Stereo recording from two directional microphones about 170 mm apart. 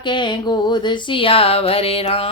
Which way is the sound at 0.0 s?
25° left (ahead or behind).